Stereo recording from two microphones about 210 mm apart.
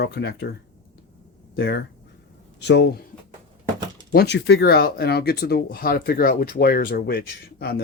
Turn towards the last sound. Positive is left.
turn(degrees=50)  # may be behind; listen again after turning